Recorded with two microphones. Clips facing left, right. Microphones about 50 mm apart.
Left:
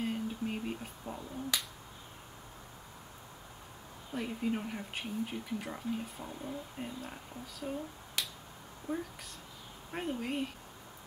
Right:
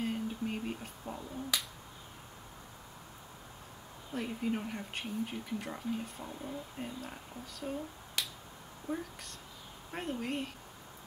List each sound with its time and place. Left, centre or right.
0.0 s finger snapping: centre
4.1 s speech: centre
7.6 s finger snapping: centre
9.8 s speech: centre